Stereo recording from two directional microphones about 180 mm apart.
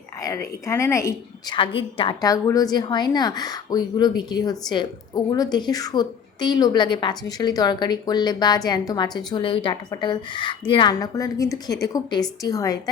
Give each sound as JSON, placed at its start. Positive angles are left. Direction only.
{"t": 0.2, "sound": "a woman's voice", "side_deg": 15}
{"t": 1.5, "sound": "a woman's voice", "side_deg": 30}